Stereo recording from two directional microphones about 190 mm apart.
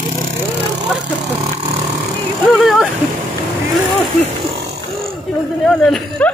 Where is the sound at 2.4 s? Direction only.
Centre (ahead or behind).